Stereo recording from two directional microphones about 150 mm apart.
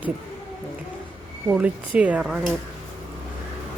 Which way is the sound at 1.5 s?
10° right (ahead or behind).